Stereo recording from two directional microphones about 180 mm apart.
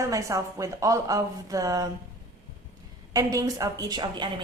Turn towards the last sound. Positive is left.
turn(degrees=-25)  # may be behind; listen again after turning